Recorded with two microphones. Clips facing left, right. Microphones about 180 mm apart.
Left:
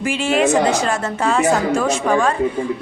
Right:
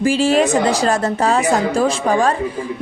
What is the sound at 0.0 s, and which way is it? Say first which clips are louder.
A woman's voice: right 3 dB; 35° right (ahead or behind).